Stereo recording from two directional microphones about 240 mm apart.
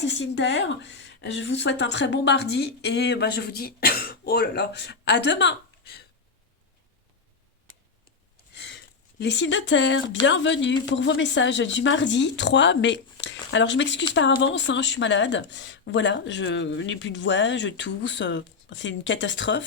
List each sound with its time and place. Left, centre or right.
0.0 s speech: left
8.5 s a sound: left
10.2 s speech: left